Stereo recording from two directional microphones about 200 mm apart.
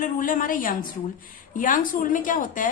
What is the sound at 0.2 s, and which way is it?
A woman's voice, 45° left (ahead or behind).